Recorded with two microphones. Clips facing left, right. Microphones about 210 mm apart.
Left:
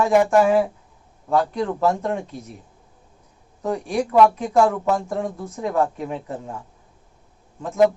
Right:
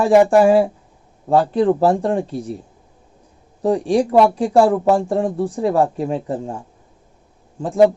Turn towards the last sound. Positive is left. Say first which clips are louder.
# right 4 dB
turn(degrees=-30)  # may be behind; listen again after turning